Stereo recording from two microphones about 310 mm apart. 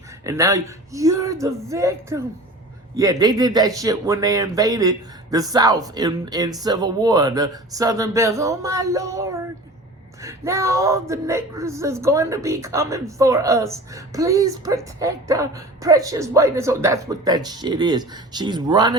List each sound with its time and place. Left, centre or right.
0.3 s speech: centre